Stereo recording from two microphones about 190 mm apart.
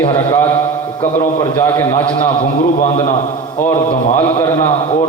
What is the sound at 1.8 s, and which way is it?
Speech, 15° left (ahead or behind).